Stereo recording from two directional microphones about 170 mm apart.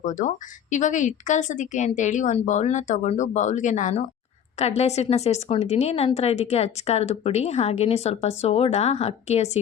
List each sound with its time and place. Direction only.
0.0 s a woman's voice: 50° left (ahead or behind)